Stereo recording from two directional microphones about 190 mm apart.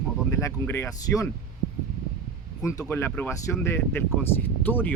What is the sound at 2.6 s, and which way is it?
Speech, 15° left (ahead or behind).